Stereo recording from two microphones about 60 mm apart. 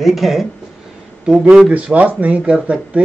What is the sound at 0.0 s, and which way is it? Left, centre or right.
Speech, centre.